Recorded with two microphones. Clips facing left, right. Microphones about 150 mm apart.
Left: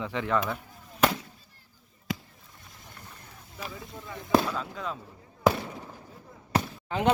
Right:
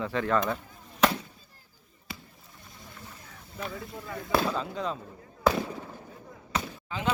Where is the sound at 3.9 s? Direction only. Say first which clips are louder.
Left 4 dB; centre (ahead or behind).